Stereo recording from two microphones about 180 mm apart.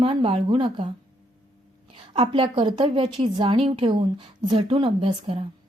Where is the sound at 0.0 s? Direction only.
30° right (ahead or behind).